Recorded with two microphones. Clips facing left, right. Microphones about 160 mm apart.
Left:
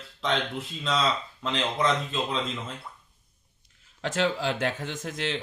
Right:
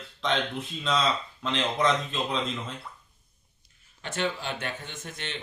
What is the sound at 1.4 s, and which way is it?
Speech, centre (ahead or behind).